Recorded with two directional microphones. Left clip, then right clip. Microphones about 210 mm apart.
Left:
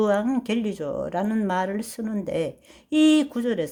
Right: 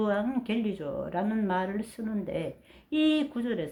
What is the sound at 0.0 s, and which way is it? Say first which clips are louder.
Speech: left 7 dB; 45° left (ahead or behind).